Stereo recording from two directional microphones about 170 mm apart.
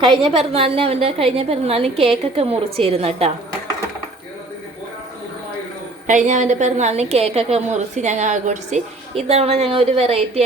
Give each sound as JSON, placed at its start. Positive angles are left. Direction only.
{"t": 0.0, "sound": "a woman's voice", "side_deg": -30}
{"t": 6.1, "sound": "a woman's voice", "side_deg": -45}